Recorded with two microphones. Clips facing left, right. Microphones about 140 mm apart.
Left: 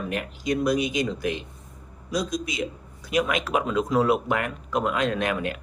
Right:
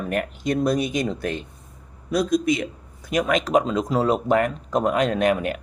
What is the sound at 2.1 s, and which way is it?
Speech, 55° right (ahead or behind).